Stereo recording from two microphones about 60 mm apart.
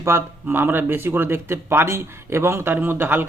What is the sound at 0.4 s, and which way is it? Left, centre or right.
A man's voice, right.